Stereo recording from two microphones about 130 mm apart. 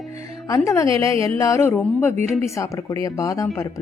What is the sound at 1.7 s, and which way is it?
Speech, 10° left (ahead or behind).